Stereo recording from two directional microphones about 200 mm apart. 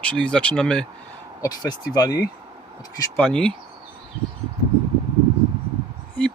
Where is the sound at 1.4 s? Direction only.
20° left (ahead or behind).